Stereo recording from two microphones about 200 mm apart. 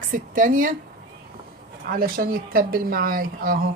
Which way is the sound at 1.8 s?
45° right (ahead or behind).